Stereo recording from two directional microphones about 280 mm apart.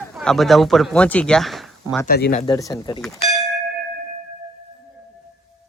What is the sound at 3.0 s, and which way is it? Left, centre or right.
Speech, centre.